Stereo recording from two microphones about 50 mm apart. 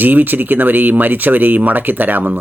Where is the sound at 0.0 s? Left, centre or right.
Right.